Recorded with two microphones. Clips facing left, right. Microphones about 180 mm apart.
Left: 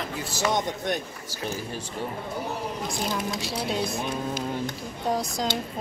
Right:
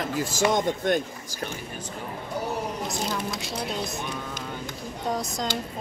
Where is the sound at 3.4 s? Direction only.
Centre (ahead or behind).